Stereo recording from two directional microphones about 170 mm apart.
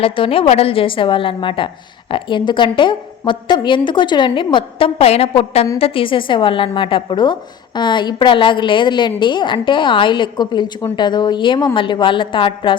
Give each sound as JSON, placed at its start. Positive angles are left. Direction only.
{"t": 0.0, "sound": "a woman's voice", "side_deg": 30}